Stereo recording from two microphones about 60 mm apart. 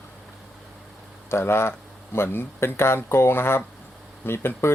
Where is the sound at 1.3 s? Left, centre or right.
Left.